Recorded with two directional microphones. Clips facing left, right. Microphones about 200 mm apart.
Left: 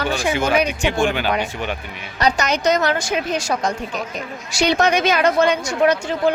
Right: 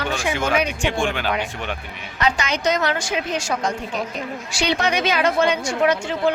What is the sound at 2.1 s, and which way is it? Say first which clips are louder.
A woman's voice: left 3 dB; 40° left (ahead or behind).